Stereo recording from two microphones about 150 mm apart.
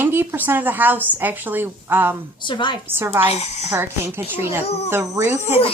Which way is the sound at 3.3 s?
45° left (ahead or behind).